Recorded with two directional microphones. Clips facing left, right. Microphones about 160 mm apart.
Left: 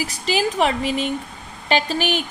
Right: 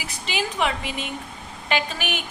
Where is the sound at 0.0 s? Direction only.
40° left (ahead or behind).